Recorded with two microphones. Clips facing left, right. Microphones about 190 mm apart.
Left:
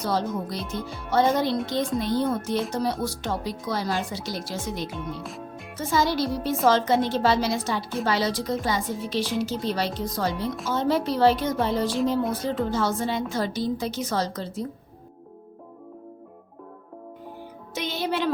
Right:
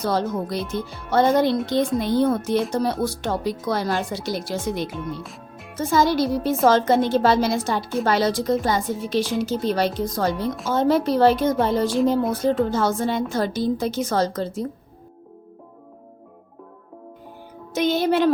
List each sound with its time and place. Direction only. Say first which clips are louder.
0.0 s speech: right 3 dB; 55° right (ahead or behind)
0.6 s speech: right 4 dB; centre (ahead or behind)
1.1 s speech: right 4 dB; 55° right (ahead or behind)
4.9 s speech: right 2 dB; centre (ahead or behind)
5.7 s a woman's voice: right 5 dB; 45° right (ahead or behind)
17.7 s a woman's voice: right 8 dB; 45° right (ahead or behind)